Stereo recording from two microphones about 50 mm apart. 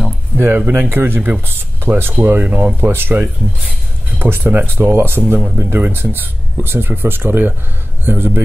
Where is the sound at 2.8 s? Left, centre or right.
Right.